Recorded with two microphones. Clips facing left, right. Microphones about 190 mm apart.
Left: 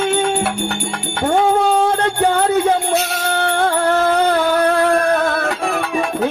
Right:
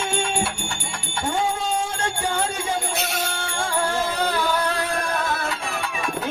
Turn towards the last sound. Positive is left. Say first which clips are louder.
# left 8 dB
turn(degrees=60)  # may be behind; listen again after turning